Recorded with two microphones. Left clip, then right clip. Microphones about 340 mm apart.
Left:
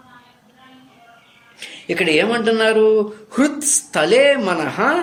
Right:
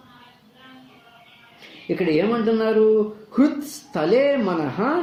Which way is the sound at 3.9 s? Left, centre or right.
Left.